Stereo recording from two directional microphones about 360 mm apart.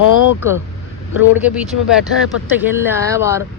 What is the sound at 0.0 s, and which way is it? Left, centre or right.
Vehicle, left.